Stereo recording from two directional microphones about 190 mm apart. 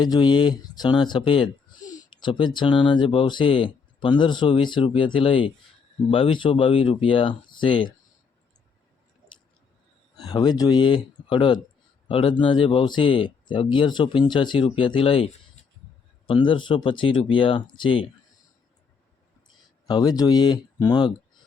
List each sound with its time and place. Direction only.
0.0 s speech: 25° left (ahead or behind)
10.2 s speech: 20° left (ahead or behind)
19.9 s speech: 20° left (ahead or behind)